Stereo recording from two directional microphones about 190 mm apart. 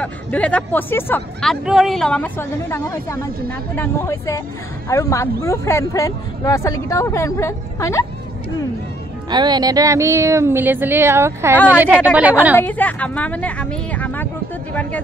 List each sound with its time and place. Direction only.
0.0 s speech: 5° left (ahead or behind)
9.3 s speech: 20° right (ahead or behind)
12.5 s speech: 10° left (ahead or behind)